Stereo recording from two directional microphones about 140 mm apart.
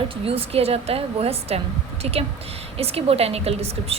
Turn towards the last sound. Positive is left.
turn(degrees=-45)  # may be behind; listen again after turning